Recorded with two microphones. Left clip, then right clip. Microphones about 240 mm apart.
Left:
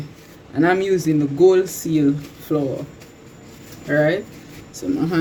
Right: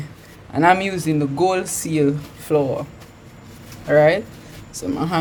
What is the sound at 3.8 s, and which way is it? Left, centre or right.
Speech, right.